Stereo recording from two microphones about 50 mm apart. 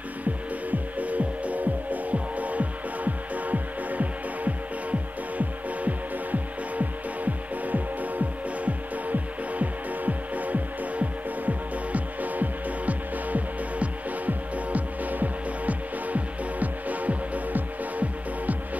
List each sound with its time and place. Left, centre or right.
0.2 s music: right
7.6 s music: right